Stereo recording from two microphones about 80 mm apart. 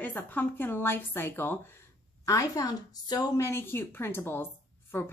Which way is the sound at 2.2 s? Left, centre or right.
Left.